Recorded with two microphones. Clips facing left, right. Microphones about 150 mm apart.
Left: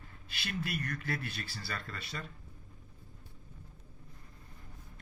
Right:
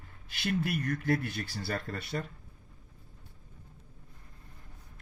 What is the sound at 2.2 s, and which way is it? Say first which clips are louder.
Speech: right 7 dB; 40° right (ahead or behind).